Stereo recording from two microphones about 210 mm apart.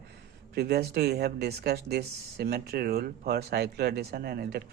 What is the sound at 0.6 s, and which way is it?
Speech, 50° right (ahead or behind).